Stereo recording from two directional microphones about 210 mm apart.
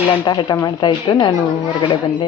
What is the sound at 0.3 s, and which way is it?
Speech, 20° left (ahead or behind).